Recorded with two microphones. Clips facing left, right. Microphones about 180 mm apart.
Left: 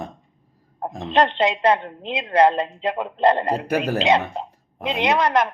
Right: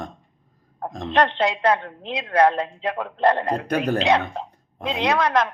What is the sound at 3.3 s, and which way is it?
A man's voice, 10° left (ahead or behind).